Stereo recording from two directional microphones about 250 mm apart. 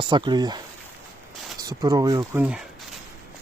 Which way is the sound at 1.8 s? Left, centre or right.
Centre.